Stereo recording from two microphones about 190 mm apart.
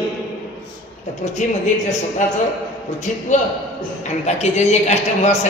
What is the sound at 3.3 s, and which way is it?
A man's voice, 40° left (ahead or behind).